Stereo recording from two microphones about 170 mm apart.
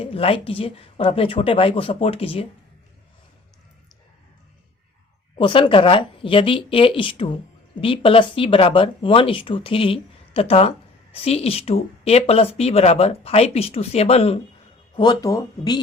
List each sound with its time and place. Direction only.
0.0 s speech: 35° left (ahead or behind)
5.4 s speech: 30° left (ahead or behind)
14.9 s speech: 25° left (ahead or behind)